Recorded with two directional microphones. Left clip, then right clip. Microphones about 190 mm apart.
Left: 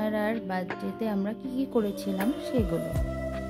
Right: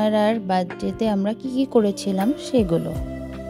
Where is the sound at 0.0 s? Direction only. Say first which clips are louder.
Right 9 dB; 35° right (ahead or behind).